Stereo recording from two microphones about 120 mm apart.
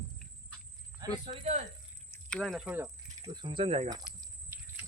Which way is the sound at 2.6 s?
15° right (ahead or behind).